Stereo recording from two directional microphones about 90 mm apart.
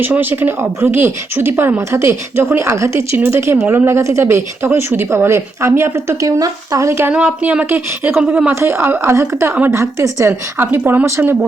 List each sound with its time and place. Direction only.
0.0 s speech: 20° right (ahead or behind)
7.1 s speech: 15° right (ahead or behind)
8.5 s speech: 30° right (ahead or behind)